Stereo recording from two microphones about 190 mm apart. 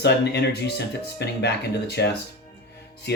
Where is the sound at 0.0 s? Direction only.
60° left (ahead or behind).